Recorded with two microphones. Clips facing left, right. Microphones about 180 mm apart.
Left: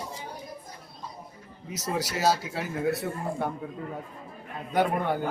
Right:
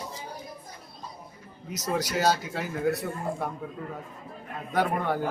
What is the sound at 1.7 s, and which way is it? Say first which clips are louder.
A man's voice: right 2 dB; 5° left (ahead or behind).